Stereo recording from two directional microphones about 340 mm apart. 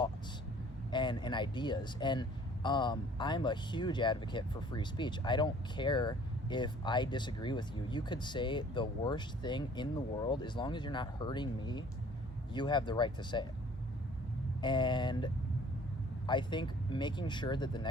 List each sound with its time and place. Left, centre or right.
0.9 s speech: centre
14.6 s speech: centre